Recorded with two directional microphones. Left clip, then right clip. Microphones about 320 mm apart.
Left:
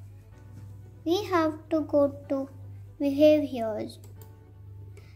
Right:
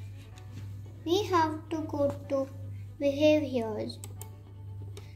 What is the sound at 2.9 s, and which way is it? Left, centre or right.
A child's voice, left.